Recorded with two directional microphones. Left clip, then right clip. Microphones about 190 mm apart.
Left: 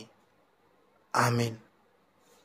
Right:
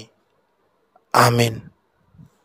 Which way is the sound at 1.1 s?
50° right (ahead or behind).